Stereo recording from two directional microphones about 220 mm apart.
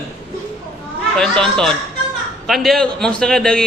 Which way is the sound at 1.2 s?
Centre (ahead or behind).